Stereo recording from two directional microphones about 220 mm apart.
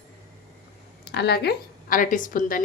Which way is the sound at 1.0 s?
50° left (ahead or behind).